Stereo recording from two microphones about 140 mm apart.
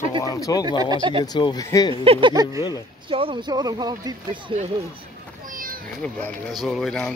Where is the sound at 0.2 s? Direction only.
25° left (ahead or behind).